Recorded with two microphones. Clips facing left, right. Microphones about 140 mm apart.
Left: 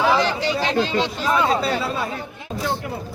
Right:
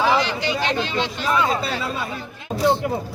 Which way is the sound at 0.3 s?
40° left (ahead or behind).